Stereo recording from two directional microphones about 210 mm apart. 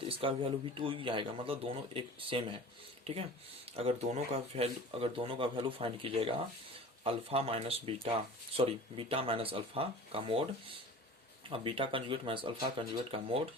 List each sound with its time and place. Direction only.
0.1 s speech: 25° right (ahead or behind)
11.4 s speech: 25° right (ahead or behind)